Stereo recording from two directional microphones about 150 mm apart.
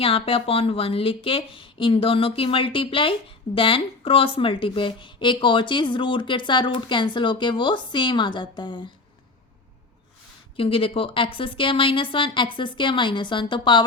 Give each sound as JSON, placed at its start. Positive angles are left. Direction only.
{"t": 0.0, "sound": "a woman's voice", "side_deg": 40}
{"t": 10.6, "sound": "a woman's voice", "side_deg": 35}